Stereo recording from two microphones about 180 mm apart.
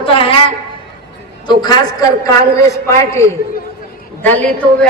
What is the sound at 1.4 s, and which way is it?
Speech, 25° left (ahead or behind).